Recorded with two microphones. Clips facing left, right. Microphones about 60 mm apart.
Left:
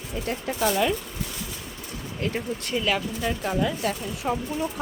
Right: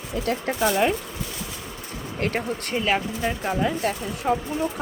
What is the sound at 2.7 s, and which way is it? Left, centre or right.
Speech, right.